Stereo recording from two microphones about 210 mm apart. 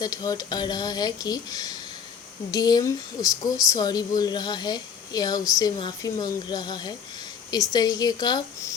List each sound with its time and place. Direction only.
0.0 s speech: 15° left (ahead or behind)